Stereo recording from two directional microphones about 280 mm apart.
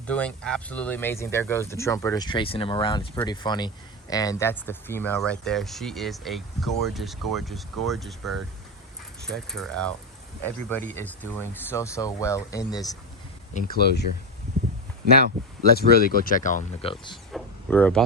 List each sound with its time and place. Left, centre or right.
0.1 s speech: centre
13.5 s speech: left
15.3 s speech: centre
15.9 s speech: left
17.3 s a sound: centre